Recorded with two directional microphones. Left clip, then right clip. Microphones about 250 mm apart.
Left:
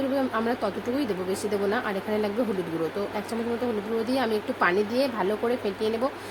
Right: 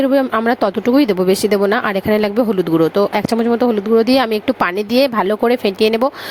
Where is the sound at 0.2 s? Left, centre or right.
Right.